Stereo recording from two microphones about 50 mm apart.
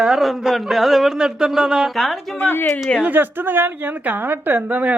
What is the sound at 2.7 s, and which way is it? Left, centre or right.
Speech, left.